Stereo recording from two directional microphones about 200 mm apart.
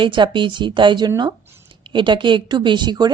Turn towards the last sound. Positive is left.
turn(degrees=-20)  # may be behind; listen again after turning